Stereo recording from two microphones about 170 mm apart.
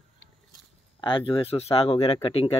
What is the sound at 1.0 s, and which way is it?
Speech, 30° left (ahead or behind).